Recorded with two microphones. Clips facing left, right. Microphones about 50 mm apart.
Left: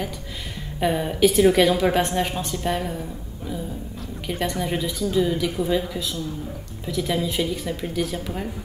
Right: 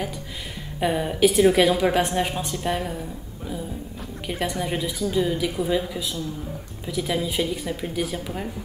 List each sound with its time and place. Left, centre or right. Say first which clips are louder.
0.7 s a woman's voice: left 1 dB; centre
4.3 s a woman's voice: left 1 dB; centre